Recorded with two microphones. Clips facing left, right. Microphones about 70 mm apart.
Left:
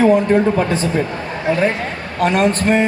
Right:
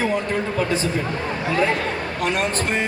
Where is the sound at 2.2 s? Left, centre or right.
Left.